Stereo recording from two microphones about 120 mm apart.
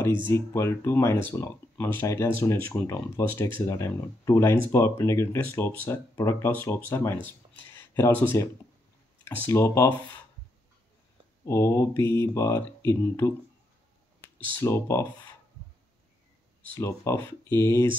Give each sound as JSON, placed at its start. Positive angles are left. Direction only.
{"t": 0.3, "sound": "speech", "side_deg": 25}
{"t": 11.4, "sound": "speech", "side_deg": 25}
{"t": 14.5, "sound": "speech", "side_deg": 20}
{"t": 16.7, "sound": "speech", "side_deg": 25}